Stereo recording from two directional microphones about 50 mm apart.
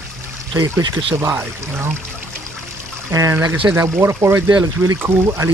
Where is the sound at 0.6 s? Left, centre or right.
Right.